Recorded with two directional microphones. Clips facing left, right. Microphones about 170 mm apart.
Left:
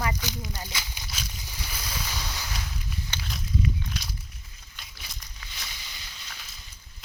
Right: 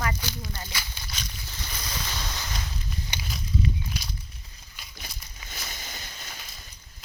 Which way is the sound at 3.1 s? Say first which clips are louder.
Right 1 dB; 10° right (ahead or behind).